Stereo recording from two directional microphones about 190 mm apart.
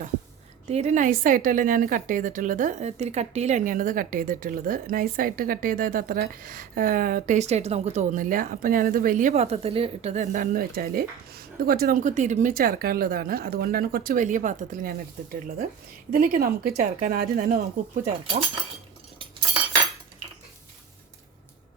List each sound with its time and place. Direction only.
0.7 s a woman's voice: 35° right (ahead or behind)